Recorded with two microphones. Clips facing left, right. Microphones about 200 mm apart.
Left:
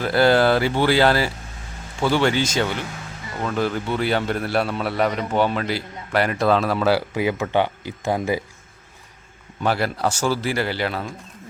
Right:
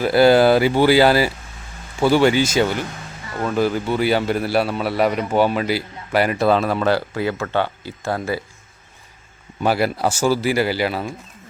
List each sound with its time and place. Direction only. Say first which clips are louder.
0.0 s a man's voice: right 4 dB; 10° right (ahead or behind)
7.1 s speech: left 1 dB; 15° left (ahead or behind)
9.6 s speech: right 3 dB; 10° right (ahead or behind)